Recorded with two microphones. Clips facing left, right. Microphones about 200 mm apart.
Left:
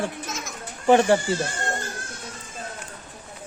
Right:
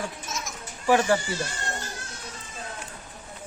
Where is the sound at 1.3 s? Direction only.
55° left (ahead or behind).